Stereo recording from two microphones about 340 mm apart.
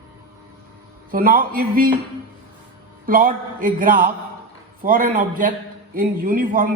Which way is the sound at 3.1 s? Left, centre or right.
Right.